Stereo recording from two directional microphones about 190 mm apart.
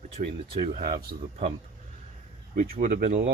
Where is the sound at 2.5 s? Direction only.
45° right (ahead or behind).